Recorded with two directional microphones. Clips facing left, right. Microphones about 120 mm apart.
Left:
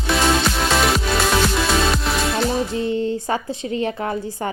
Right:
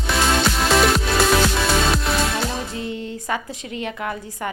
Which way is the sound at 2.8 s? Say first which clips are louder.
Left 7 dB; 30° left (ahead or behind).